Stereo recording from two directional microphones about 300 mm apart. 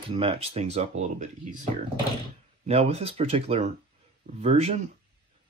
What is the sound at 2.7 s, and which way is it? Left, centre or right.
Speech, right.